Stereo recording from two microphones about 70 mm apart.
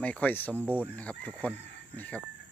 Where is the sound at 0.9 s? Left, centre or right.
Left.